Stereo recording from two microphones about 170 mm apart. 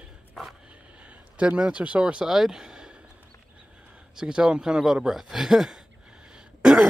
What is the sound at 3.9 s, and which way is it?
Speech, 5° right (ahead or behind).